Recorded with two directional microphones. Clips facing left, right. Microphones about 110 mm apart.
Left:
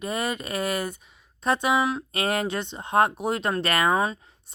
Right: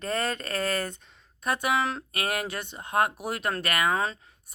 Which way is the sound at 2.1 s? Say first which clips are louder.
Left 5 dB; 25° left (ahead or behind).